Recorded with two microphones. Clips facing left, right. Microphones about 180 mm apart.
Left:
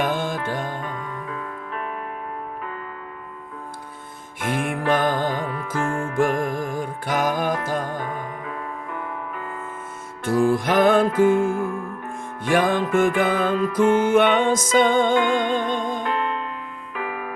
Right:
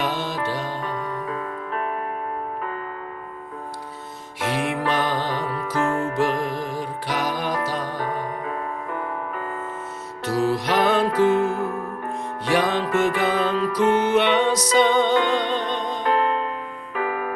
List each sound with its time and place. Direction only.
0.0 s music: 50° left (ahead or behind)
0.9 s music: 45° right (ahead or behind)
4.4 s music: 50° left (ahead or behind)
8.4 s music: 40° right (ahead or behind)
10.2 s music: 50° left (ahead or behind)
16.0 s music: 40° right (ahead or behind)